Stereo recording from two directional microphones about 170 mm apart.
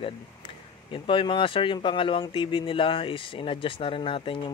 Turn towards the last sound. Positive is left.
turn(degrees=30)  # may be behind; listen again after turning